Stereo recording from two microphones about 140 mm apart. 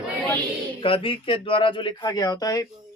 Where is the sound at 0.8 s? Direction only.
40° left (ahead or behind).